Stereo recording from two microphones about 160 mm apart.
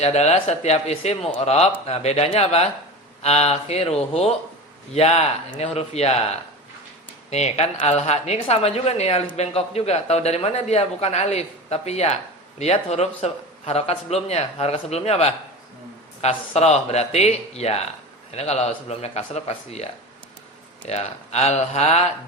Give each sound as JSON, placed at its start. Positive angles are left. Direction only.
{"t": 0.0, "sound": "a man's voice", "side_deg": 40}
{"t": 4.9, "sound": "a man's voice", "side_deg": 40}
{"t": 7.3, "sound": "a woman's voice", "side_deg": 45}